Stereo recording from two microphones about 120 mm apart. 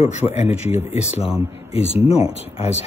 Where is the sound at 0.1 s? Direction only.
65° left (ahead or behind).